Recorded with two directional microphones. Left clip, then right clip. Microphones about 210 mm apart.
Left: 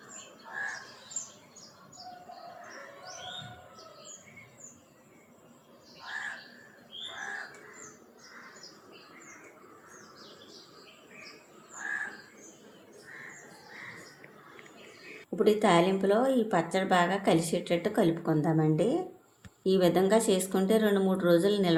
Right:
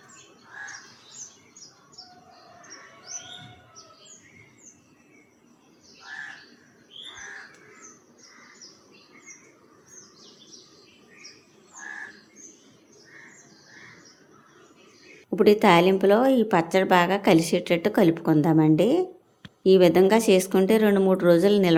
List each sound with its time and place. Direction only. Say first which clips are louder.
15.4 s a woman's voice: right 7 dB; 45° right (ahead or behind)